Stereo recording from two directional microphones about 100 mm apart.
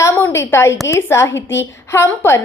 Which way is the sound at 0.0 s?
25° left (ahead or behind).